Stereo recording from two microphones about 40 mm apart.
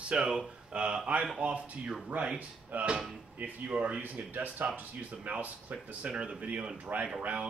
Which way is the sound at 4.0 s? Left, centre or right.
Right.